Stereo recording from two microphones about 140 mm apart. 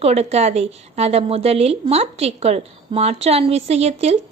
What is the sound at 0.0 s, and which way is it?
A woman's voice, 50° right (ahead or behind).